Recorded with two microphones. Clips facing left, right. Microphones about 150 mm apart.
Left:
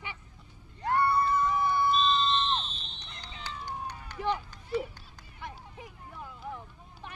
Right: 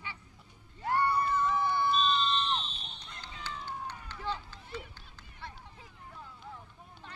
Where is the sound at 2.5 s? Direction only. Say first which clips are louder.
Left 2 dB; 10° right (ahead or behind).